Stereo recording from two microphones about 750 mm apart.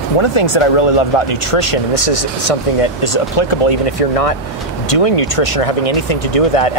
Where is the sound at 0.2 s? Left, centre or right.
Left.